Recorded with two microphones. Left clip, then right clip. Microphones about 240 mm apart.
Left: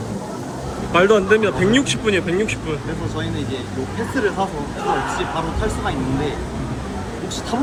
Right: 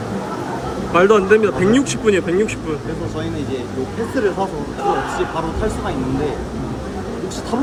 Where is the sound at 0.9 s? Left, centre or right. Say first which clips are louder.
Right 2 dB; centre.